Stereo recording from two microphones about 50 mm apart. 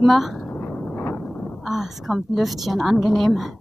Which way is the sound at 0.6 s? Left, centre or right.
Left.